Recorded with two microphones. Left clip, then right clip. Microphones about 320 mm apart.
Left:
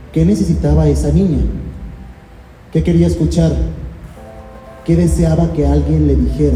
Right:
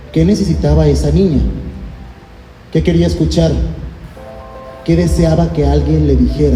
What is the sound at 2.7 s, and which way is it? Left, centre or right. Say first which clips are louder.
Speech: right 1 dB; right.